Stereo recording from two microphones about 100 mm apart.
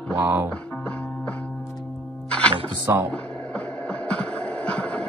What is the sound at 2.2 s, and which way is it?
Music, 10° left (ahead or behind).